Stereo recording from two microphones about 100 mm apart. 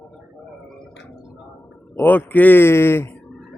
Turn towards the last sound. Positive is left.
turn(degrees=25)  # may be behind; listen again after turning